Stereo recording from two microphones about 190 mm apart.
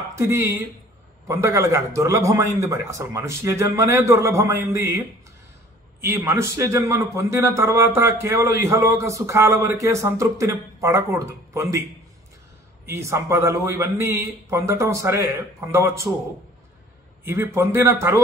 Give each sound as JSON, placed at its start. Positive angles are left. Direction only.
{"t": 0.1, "sound": "a man's voice", "side_deg": -15}
{"t": 12.8, "sound": "a man's voice", "side_deg": -15}
{"t": 17.2, "sound": "a man's voice", "side_deg": -10}